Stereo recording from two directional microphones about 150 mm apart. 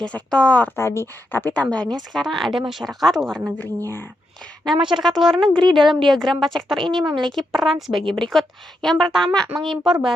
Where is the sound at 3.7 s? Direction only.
15° left (ahead or behind).